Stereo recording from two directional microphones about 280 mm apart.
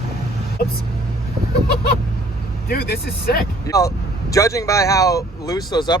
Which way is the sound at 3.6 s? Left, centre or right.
Centre.